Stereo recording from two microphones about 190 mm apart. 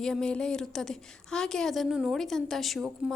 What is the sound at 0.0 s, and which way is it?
A woman's voice, 5° left (ahead or behind).